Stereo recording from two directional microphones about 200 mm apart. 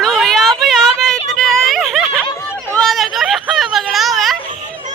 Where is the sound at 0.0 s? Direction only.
Centre (ahead or behind).